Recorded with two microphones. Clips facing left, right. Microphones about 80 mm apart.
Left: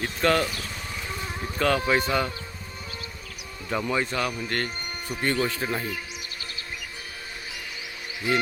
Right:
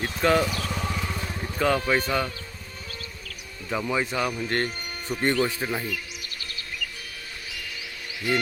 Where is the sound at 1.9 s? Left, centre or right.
Centre.